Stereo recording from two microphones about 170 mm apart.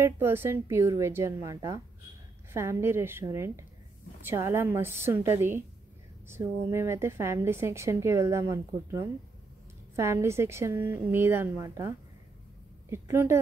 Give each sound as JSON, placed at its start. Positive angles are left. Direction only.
{"t": 0.0, "sound": "a woman's voice", "side_deg": -15}
{"t": 12.9, "sound": "a woman's voice", "side_deg": -15}